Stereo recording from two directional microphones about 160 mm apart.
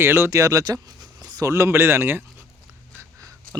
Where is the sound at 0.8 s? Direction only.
25° right (ahead or behind).